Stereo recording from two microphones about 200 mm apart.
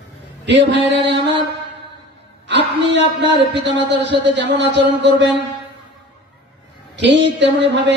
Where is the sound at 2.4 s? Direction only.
60° right (ahead or behind).